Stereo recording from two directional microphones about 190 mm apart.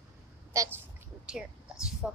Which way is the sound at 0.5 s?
15° right (ahead or behind).